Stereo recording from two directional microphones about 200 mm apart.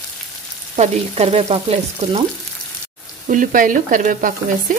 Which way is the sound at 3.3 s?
40° right (ahead or behind).